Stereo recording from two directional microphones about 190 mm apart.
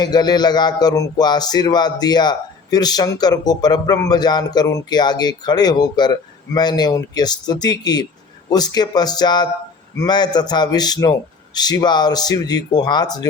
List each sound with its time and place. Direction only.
0.0 s speech: 20° left (ahead or behind)